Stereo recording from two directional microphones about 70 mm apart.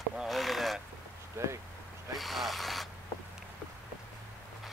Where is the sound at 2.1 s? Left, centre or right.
Centre.